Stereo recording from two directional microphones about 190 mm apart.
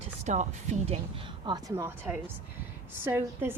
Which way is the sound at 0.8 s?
25° right (ahead or behind).